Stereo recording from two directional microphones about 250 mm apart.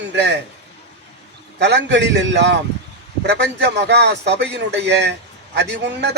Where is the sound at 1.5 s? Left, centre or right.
Right.